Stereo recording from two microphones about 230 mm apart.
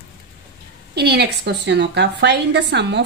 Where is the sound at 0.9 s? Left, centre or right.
Right.